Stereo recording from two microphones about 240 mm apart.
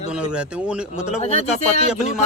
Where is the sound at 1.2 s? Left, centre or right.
Left.